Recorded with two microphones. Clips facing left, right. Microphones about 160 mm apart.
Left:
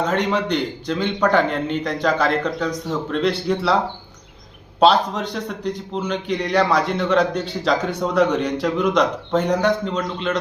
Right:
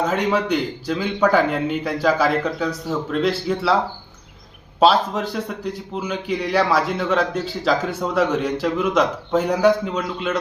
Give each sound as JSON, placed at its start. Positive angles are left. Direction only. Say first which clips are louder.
{"t": 0.0, "sound": "a man's voice", "louder": "even", "side_deg": -5}
{"t": 4.8, "sound": "a man's voice", "louder": "even", "side_deg": -5}